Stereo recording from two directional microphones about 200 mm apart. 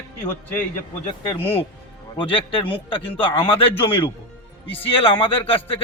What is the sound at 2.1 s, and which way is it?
Speech, 25° left (ahead or behind).